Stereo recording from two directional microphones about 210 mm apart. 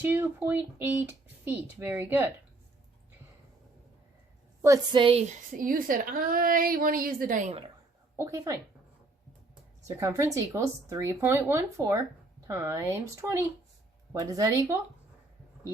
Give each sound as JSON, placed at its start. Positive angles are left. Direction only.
{"t": 0.0, "sound": "speech", "side_deg": -10}
{"t": 4.6, "sound": "a woman's voice", "side_deg": -20}
{"t": 5.5, "sound": "a woman's voice", "side_deg": -40}
{"t": 8.1, "sound": "speech", "side_deg": -15}
{"t": 9.8, "sound": "speech", "side_deg": -15}